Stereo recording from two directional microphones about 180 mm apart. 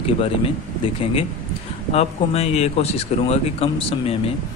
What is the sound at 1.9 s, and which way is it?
A man's voice, 35° left (ahead or behind).